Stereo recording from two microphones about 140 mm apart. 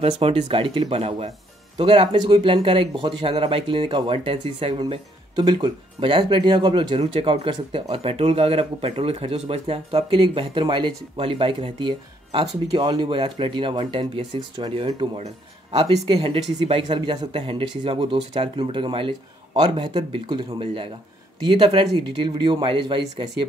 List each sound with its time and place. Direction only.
0.0 s speech: 40° right (ahead or behind)